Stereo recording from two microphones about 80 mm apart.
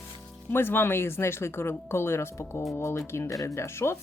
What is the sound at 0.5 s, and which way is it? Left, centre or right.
Speech, left.